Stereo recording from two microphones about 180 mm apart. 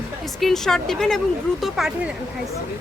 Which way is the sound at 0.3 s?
Centre (ahead or behind).